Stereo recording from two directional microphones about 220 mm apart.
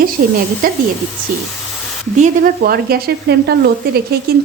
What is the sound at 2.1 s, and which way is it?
A woman's voice, 40° right (ahead or behind).